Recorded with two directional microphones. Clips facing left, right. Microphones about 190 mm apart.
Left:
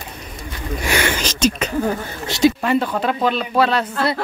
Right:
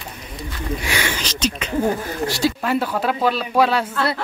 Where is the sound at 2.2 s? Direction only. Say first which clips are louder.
Left 5 dB; 20° left (ahead or behind).